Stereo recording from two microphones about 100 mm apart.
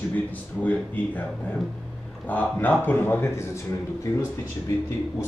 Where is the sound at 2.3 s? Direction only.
15° left (ahead or behind).